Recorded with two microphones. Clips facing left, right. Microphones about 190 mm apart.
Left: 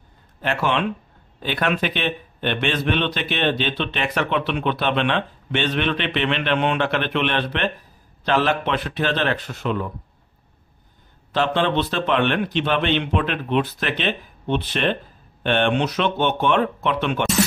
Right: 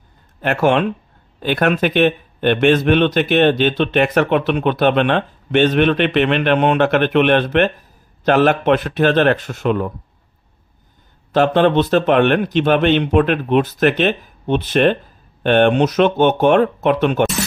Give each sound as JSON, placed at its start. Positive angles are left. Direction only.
{"t": 0.4, "sound": "speech", "side_deg": -50}
{"t": 11.3, "sound": "speech", "side_deg": -45}